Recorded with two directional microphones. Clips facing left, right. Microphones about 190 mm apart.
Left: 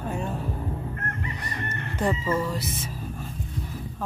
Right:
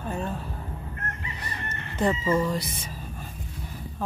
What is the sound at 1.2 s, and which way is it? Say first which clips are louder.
Chicken: left 4 dB; 55° left (ahead or behind).